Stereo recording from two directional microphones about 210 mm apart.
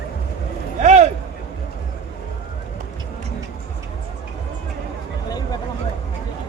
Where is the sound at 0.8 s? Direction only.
35° right (ahead or behind).